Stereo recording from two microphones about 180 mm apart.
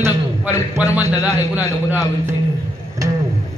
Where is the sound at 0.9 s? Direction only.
10° right (ahead or behind).